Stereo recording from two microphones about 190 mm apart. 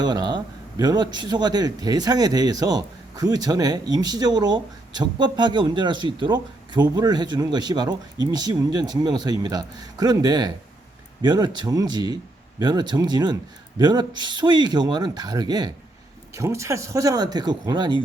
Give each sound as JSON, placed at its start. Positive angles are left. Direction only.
{"t": 0.0, "sound": "a man's voice", "side_deg": -20}